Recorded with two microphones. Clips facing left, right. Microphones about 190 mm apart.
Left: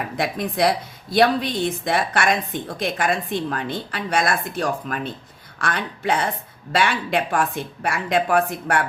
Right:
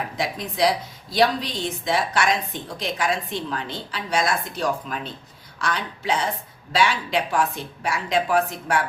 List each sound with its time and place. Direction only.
0.2 s a woman's voice: 55° left (ahead or behind)